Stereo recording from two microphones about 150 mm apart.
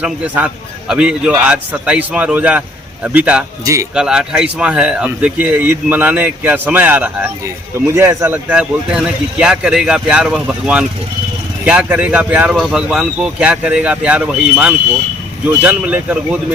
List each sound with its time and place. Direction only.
0.0 s a man's voice: 10° right (ahead or behind)
3.6 s a man's voice: 20° right (ahead or behind)
3.9 s a man's voice: 5° right (ahead or behind)